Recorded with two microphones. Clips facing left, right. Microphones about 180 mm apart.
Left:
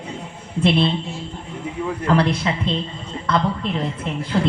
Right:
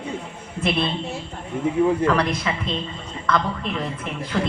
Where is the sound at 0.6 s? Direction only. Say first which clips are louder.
Left 5 dB; 30° left (ahead or behind).